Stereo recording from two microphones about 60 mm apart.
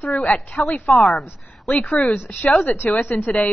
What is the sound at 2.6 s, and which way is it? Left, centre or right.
Speech, left.